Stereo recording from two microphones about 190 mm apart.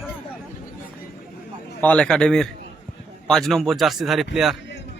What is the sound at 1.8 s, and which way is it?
A man's voice, 5° left (ahead or behind).